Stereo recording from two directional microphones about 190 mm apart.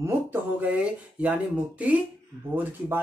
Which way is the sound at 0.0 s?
10° right (ahead or behind).